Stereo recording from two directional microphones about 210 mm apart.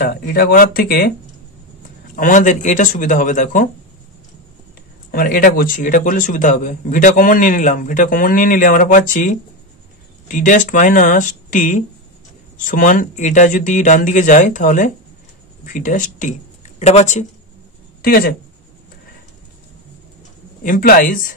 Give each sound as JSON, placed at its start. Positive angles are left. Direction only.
{"t": 0.1, "sound": "speech", "side_deg": 45}
{"t": 2.1, "sound": "a man's voice", "side_deg": 40}
{"t": 5.1, "sound": "a man's voice", "side_deg": 40}
{"t": 18.0, "sound": "speech", "side_deg": 45}
{"t": 20.6, "sound": "a man's voice", "side_deg": 40}